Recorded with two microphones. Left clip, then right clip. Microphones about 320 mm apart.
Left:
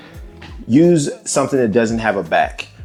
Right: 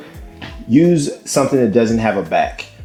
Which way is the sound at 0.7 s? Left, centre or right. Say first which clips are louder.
Left 1 dB; right.